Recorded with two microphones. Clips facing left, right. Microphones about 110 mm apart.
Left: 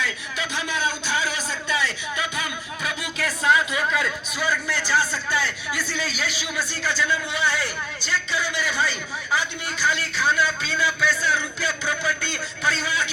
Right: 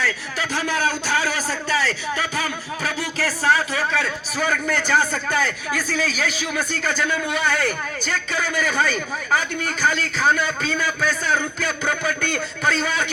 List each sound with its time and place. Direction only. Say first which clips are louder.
0.5 s a sound: right 5 dB; 40° right (ahead or behind)
2.1 s music: right 3 dB; 40° right (ahead or behind)
4.4 s a man's voice: right 4 dB; 55° right (ahead or behind)